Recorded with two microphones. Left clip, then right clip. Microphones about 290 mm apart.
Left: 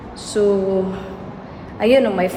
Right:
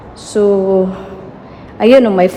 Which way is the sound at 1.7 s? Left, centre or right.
Right.